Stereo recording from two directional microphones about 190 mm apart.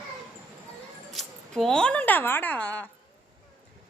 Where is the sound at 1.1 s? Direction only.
Centre (ahead or behind).